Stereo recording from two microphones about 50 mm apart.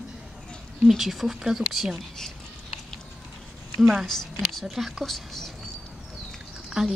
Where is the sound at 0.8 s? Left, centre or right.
Centre.